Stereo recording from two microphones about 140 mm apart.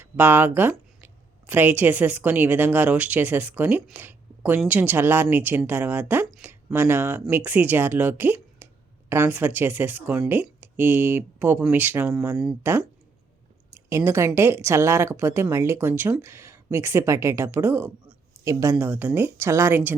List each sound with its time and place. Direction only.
0.0 s speech: 15° right (ahead or behind)
3.9 s a sound: 15° right (ahead or behind)
4.6 s speech: 10° right (ahead or behind)